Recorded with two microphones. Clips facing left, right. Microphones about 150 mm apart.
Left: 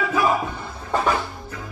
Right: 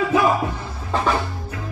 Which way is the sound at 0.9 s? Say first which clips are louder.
Right 1 dB; 5° left (ahead or behind).